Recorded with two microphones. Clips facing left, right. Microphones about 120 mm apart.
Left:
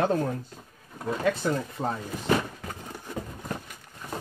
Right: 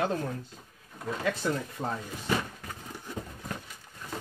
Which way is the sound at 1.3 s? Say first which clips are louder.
Left 3 dB; 30° left (ahead or behind).